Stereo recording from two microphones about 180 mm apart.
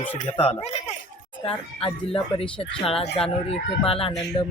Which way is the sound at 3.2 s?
35° left (ahead or behind).